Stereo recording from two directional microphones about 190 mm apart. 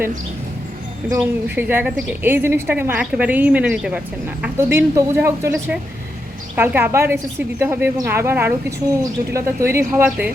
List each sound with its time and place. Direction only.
1.1 s a woman's voice: 10° right (ahead or behind)